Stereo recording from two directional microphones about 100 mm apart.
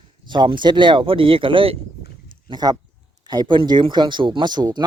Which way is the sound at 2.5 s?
40° right (ahead or behind).